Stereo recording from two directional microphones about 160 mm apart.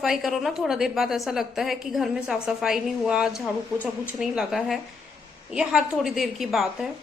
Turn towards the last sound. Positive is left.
turn(degrees=0)  # may be behind; listen again after turning